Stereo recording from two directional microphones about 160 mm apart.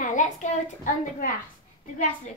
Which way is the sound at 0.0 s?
50° left (ahead or behind).